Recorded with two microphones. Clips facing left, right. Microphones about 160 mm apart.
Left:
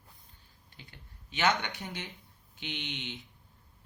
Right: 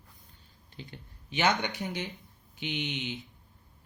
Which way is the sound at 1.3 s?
15° right (ahead or behind).